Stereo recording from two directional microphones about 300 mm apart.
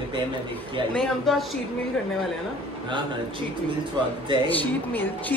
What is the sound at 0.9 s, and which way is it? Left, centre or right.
Speech, centre.